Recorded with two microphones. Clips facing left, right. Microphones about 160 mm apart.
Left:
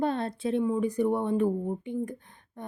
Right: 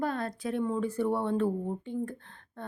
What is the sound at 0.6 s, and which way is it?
Speech, 15° left (ahead or behind).